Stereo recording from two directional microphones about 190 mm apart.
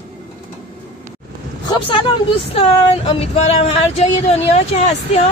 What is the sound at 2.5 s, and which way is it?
Speech, 30° left (ahead or behind).